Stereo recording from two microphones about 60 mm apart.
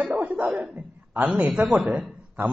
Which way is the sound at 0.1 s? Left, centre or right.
Right.